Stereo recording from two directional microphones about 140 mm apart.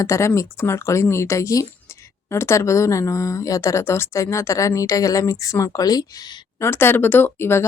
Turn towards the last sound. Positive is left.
turn(degrees=15)  # may be behind; listen again after turning